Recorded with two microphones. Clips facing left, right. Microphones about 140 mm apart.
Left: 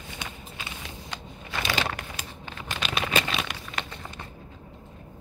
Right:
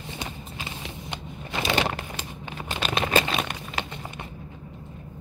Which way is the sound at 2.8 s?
40° right (ahead or behind).